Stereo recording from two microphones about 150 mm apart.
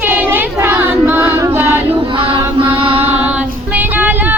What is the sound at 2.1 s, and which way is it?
Music, 35° right (ahead or behind).